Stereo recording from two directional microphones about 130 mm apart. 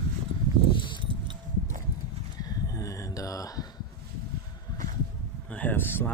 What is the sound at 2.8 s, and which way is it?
Mantra, 25° left (ahead or behind).